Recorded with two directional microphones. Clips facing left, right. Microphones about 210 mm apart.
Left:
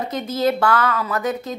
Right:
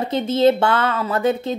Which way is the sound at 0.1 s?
25° right (ahead or behind).